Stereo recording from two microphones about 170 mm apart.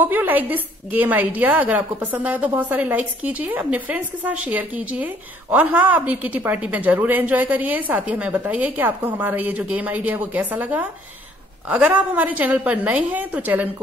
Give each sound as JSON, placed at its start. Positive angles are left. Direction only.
{"t": 0.0, "sound": "a woman's voice", "side_deg": -10}